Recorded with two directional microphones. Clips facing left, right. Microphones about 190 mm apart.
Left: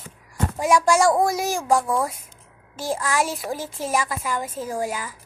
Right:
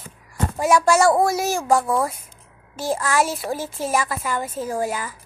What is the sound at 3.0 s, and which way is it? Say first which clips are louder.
A child's voice: right 3 dB; 15° left (ahead or behind).